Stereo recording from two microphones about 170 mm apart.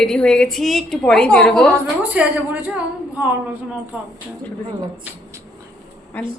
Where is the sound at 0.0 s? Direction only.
5° left (ahead or behind).